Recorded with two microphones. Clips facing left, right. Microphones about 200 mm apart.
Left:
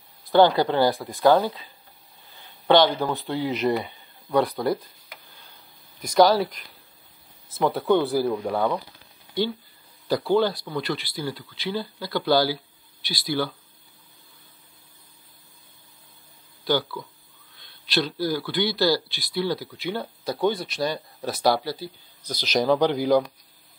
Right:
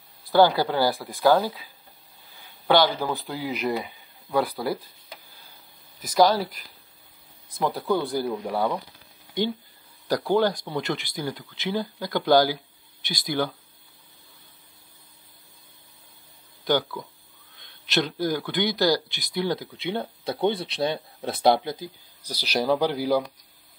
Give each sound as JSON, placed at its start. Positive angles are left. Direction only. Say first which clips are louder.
{"t": 0.3, "sound": "speech", "louder": "left 1 dB", "side_deg": -5}
{"t": 2.7, "sound": "speech", "louder": "left 2 dB", "side_deg": -5}
{"t": 5.9, "sound": "speech", "louder": "left 2 dB", "side_deg": 0}
{"t": 8.5, "sound": "speech", "louder": "left 2 dB", "side_deg": -10}
{"t": 10.0, "sound": "speech", "louder": "left 1 dB", "side_deg": -15}
{"t": 16.6, "sound": "speech", "louder": "even", "side_deg": -15}
{"t": 18.2, "sound": "speech", "louder": "even", "side_deg": -20}